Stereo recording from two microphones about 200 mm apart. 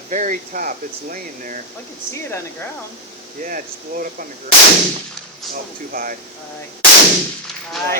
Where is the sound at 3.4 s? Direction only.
45° right (ahead or behind).